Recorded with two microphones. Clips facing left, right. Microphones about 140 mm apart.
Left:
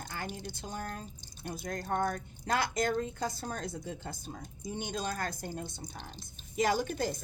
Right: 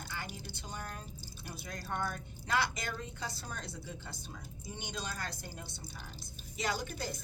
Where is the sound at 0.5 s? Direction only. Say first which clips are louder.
Left 5 dB; 45° left (ahead or behind).